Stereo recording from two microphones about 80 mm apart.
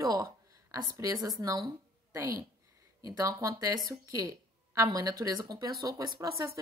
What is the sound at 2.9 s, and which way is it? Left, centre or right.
Speech, right.